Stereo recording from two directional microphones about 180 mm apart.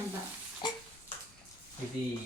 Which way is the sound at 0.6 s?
25° left (ahead or behind).